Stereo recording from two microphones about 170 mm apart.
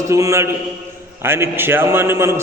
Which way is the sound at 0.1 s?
15° right (ahead or behind).